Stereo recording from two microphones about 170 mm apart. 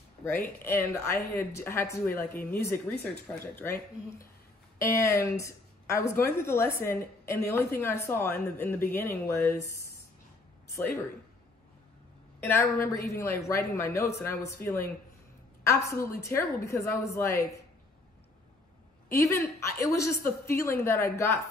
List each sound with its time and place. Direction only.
0.7 s speech: 15° left (ahead or behind)
12.4 s speech: 10° left (ahead or behind)
19.0 s speech: 15° left (ahead or behind)